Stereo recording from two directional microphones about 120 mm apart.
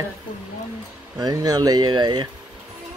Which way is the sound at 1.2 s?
30° right (ahead or behind).